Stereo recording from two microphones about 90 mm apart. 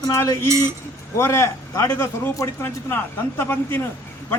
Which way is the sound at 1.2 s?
30° left (ahead or behind).